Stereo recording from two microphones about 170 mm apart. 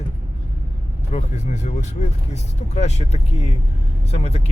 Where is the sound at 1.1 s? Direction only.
45° left (ahead or behind).